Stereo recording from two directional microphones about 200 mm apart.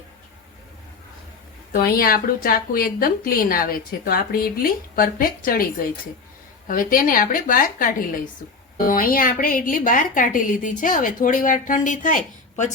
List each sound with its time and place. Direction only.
1.7 s a woman's voice: 45° left (ahead or behind)